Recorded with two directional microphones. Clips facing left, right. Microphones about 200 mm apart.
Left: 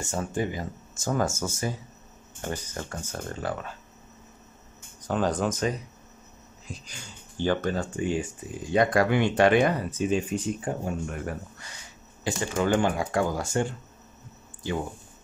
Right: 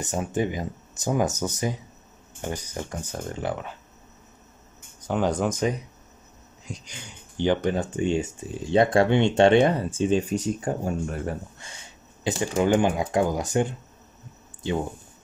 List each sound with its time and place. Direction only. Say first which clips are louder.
0.0 s speech: right 3 dB; 20° right (ahead or behind)
5.0 s speech: right 2 dB; 15° right (ahead or behind)